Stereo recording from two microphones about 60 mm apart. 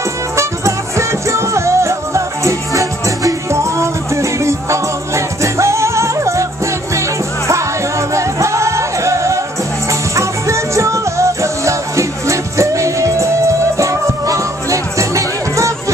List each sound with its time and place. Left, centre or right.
0.4 s music: right